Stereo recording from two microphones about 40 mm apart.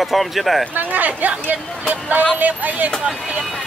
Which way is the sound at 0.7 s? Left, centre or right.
Right.